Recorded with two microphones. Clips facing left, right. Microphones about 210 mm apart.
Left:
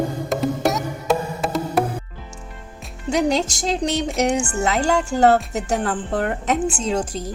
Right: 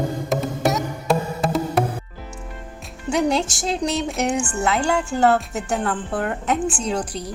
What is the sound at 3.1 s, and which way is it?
Speech, 40° left (ahead or behind).